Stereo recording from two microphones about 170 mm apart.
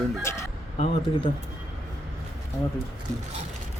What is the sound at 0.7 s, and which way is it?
Speech, 40° left (ahead or behind).